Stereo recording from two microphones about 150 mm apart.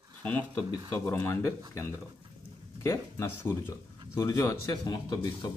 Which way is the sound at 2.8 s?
20° left (ahead or behind).